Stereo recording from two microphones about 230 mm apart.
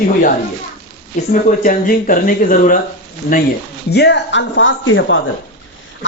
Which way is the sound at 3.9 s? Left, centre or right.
Left.